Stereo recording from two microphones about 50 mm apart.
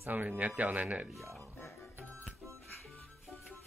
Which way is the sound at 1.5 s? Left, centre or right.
Left.